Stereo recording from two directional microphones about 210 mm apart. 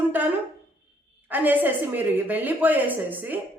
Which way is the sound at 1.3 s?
10° right (ahead or behind).